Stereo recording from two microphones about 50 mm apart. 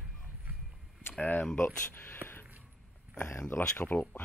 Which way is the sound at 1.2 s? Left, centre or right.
Left.